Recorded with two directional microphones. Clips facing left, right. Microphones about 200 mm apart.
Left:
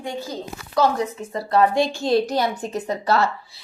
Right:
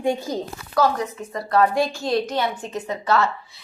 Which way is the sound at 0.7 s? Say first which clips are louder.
Left 1 dB; 25° left (ahead or behind).